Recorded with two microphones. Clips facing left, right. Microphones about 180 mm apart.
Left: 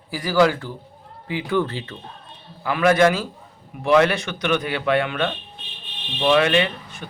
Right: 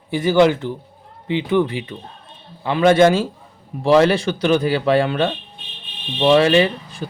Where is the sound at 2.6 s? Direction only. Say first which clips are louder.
Right 4 dB; 25° right (ahead or behind).